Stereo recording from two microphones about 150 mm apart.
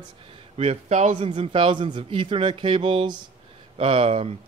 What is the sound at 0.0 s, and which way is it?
Speech, 40° right (ahead or behind).